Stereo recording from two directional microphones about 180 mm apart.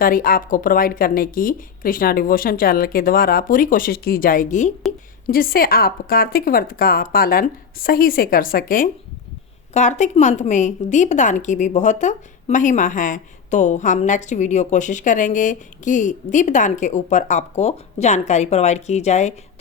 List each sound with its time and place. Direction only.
0.0 s a woman's voice: 50° left (ahead or behind)
9.7 s a woman's voice: 40° left (ahead or behind)